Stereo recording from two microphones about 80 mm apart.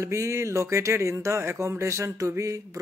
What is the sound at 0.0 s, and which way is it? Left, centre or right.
Speech, right.